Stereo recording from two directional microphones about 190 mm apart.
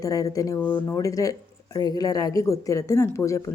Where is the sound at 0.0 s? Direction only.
20° left (ahead or behind).